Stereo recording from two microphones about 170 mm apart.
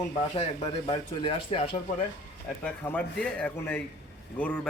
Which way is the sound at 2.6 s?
10° left (ahead or behind).